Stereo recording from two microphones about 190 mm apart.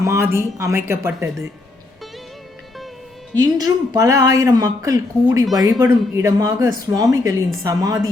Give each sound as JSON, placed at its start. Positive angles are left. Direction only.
{"t": 0.0, "sound": "speech", "side_deg": -15}
{"t": 3.3, "sound": "a man's voice", "side_deg": -20}